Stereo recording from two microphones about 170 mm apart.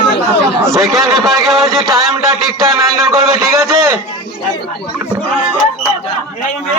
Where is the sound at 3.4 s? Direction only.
15° right (ahead or behind).